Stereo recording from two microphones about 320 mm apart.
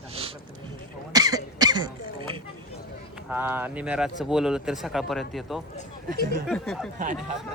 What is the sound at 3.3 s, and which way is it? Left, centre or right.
Speech, centre.